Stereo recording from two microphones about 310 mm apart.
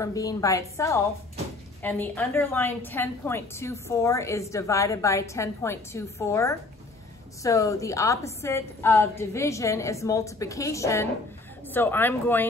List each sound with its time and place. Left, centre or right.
0.0 s a woman's voice: centre